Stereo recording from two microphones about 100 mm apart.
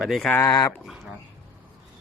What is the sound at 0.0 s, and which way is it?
Speech, centre (ahead or behind).